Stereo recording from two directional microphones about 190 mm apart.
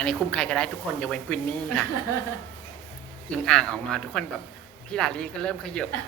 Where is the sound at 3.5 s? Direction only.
5° left (ahead or behind).